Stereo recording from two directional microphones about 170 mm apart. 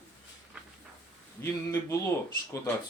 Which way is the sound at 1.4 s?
15° left (ahead or behind).